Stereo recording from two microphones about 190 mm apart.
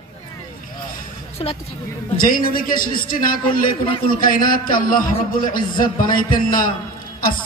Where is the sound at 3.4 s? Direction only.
25° left (ahead or behind).